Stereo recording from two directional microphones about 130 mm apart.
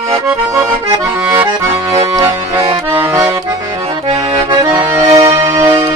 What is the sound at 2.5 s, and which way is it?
Accordion, 50° right (ahead or behind).